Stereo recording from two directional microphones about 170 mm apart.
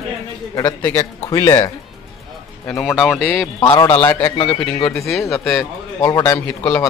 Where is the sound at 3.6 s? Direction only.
25° left (ahead or behind).